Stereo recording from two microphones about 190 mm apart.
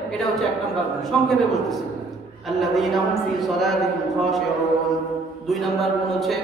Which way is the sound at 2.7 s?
Centre (ahead or behind).